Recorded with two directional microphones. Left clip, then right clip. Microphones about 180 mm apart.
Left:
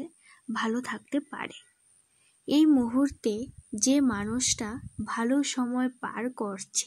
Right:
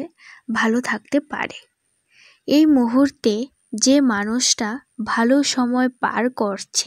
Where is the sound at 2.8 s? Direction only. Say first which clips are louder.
Right 10 dB; 35° right (ahead or behind).